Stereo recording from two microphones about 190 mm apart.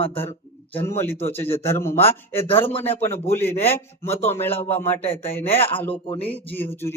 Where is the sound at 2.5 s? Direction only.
30° left (ahead or behind).